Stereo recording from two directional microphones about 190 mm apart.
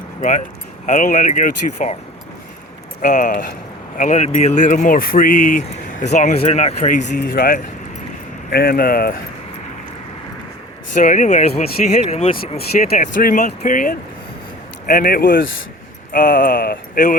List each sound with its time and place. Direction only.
0.2 s speech: 40° left (ahead or behind)
3.0 s speech: 45° left (ahead or behind)
7.2 s speech: 50° left (ahead or behind)
10.9 s speech: 40° left (ahead or behind)
12.5 s speech: 50° left (ahead or behind)